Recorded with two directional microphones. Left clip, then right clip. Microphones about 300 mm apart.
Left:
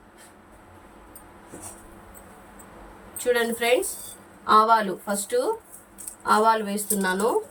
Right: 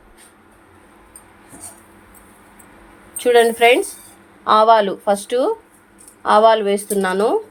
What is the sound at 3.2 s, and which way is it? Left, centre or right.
Speech, centre.